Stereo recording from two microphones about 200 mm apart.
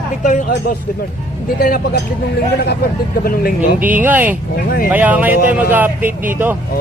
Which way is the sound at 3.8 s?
10° right (ahead or behind).